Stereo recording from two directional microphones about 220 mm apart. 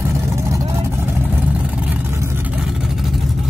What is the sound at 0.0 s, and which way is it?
Vehicle, 15° right (ahead or behind).